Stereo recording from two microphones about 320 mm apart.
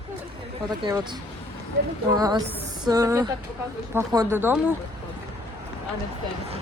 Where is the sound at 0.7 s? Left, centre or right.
Centre.